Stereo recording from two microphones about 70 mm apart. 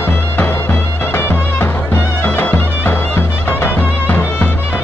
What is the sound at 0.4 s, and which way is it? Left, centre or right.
Music, left.